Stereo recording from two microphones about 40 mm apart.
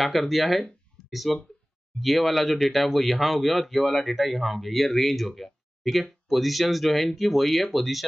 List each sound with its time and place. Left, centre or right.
0.0 s speech: centre